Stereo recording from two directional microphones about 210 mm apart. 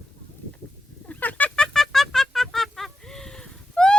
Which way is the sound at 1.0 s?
10° left (ahead or behind).